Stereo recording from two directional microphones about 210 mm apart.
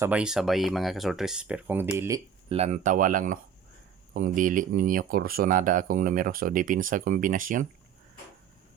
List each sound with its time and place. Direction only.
0.0 s speech: 5° right (ahead or behind)
2.5 s speech: 35° right (ahead or behind)